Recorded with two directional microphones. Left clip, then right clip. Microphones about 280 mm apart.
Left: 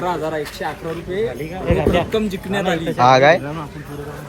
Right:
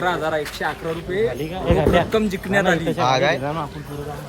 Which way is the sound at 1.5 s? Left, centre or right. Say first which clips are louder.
Left 2 dB; right.